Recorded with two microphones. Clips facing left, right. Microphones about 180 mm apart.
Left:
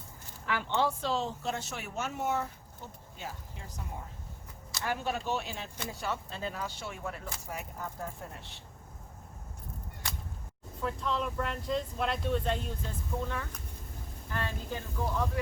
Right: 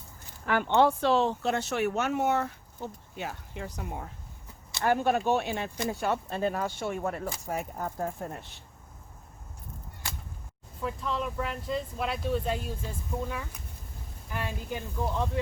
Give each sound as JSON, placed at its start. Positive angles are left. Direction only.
{"t": 0.4, "sound": "speech", "side_deg": -55}
{"t": 4.8, "sound": "speech", "side_deg": -55}
{"t": 10.8, "sound": "speech", "side_deg": -5}